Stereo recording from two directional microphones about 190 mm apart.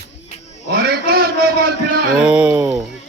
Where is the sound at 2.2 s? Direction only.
5° right (ahead or behind).